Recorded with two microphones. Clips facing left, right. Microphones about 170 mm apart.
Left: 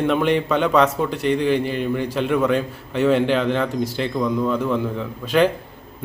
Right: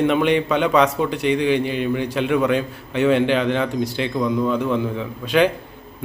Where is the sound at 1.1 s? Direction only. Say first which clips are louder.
Right 1 dB; 70° right (ahead or behind).